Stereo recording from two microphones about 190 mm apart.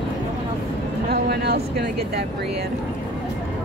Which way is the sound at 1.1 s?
55° right (ahead or behind).